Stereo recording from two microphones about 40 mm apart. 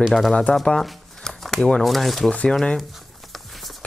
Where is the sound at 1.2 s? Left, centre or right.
Centre.